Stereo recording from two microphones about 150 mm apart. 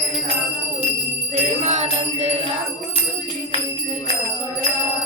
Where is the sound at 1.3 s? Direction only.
50° right (ahead or behind).